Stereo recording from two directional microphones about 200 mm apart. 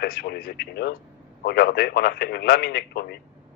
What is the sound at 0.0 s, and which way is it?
A man's voice, 50° left (ahead or behind).